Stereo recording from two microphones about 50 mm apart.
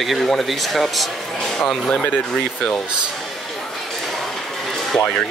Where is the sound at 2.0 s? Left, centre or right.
Left.